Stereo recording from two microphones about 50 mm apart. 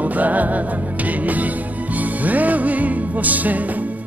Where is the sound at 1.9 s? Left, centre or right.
Right.